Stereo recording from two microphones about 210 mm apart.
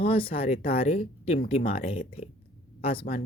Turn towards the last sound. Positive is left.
turn(degrees=25)  # may be behind; listen again after turning